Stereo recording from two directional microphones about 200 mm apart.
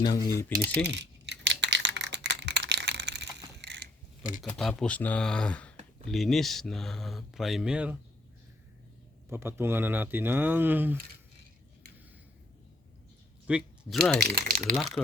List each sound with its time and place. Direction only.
0.0 s speech: 20° left (ahead or behind)
0.5 s speech: 55° right (ahead or behind)
0.9 s a sound: 60° right (ahead or behind)
4.4 s speech: centre (ahead or behind)
9.3 s speech: 10° right (ahead or behind)
13.5 s speech: centre (ahead or behind)